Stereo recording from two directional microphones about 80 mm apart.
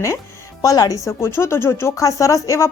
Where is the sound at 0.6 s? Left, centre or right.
Left.